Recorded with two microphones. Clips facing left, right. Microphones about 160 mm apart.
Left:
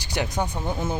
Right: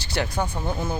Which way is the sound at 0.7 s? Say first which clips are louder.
Even; centre (ahead or behind).